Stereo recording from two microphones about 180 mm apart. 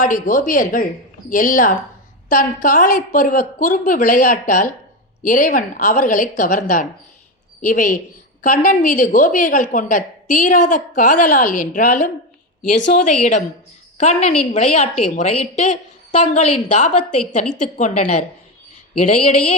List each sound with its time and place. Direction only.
0.0 s a woman's voice: 50° left (ahead or behind)